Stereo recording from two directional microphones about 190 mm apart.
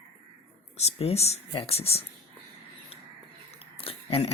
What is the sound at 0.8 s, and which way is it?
Speech, 35° left (ahead or behind).